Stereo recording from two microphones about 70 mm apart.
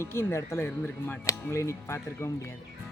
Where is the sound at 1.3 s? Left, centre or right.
Left.